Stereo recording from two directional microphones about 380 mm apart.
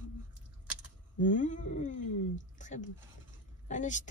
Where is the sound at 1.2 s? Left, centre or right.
Centre.